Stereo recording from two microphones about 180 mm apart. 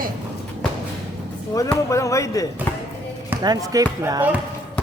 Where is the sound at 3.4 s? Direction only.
20° right (ahead or behind).